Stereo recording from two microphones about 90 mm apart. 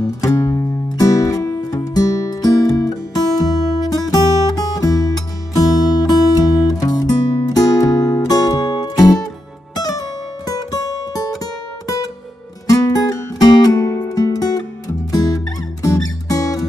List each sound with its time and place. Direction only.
0.0 s music: 40° left (ahead or behind)
12.6 s music: 40° left (ahead or behind)